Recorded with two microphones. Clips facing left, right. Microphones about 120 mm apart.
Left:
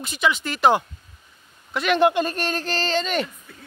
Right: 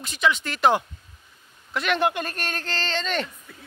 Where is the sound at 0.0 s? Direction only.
5° left (ahead or behind).